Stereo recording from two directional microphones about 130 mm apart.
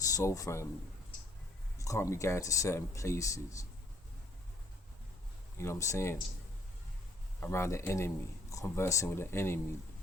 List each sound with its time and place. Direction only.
0.0 s speech: 25° left (ahead or behind)
1.8 s speech: 25° left (ahead or behind)
5.5 s speech: 25° left (ahead or behind)
7.3 s speech: 20° left (ahead or behind)